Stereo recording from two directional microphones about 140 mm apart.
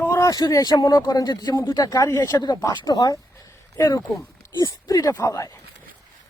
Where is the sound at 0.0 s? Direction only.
20° left (ahead or behind).